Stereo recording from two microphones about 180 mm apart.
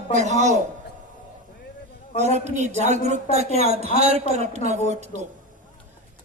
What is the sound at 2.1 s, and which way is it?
A woman's voice, 40° right (ahead or behind).